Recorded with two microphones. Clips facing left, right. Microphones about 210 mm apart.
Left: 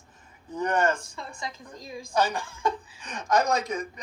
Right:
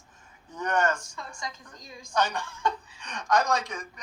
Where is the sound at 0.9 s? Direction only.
55° left (ahead or behind).